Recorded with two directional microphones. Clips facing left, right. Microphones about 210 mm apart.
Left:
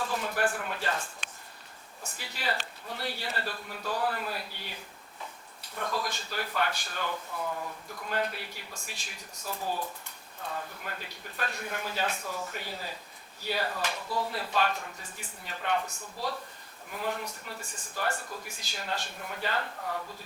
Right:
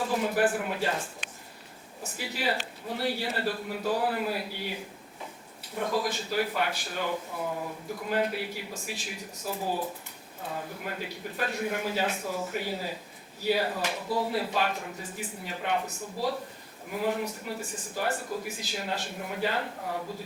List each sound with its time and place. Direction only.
0.0 s a man's voice: 10° right (ahead or behind)
2.0 s a man's voice: 5° right (ahead or behind)